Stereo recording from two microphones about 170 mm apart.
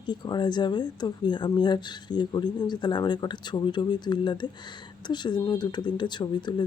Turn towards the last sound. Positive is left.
turn(degrees=25)  # may be behind; listen again after turning